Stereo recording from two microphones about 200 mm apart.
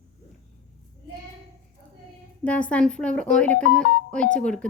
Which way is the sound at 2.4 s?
5° left (ahead or behind).